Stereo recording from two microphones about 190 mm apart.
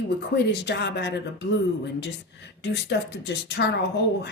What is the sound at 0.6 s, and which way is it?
Speech, 65° left (ahead or behind).